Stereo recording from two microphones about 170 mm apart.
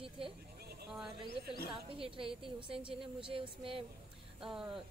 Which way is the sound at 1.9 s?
30° right (ahead or behind).